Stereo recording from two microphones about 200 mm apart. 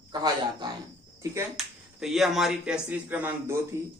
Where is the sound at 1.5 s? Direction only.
Centre (ahead or behind).